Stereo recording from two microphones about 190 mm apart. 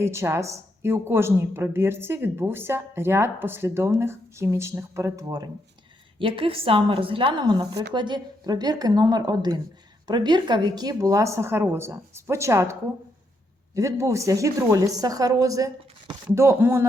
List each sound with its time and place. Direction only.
0.0 s a woman's voice: 15° right (ahead or behind)
13.7 s a woman's voice: 15° right (ahead or behind)